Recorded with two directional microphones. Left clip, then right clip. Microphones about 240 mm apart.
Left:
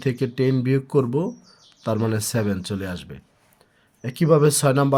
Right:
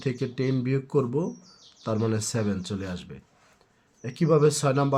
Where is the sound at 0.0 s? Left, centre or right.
Left.